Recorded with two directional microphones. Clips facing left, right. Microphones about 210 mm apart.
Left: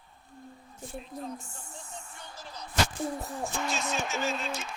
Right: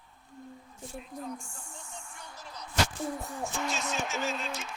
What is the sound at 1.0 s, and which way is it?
Speech, 30° left (ahead or behind).